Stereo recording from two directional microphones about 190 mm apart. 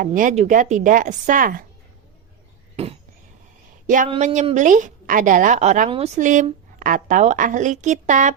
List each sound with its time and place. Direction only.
0.0 s chopping: 45° right (ahead or behind)
2.8 s a sound: 30° right (ahead or behind)
3.8 s a woman's voice: 40° right (ahead or behind)